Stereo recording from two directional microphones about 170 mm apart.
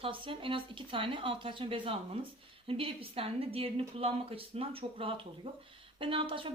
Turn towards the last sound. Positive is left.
turn(degrees=-30)  # may be behind; listen again after turning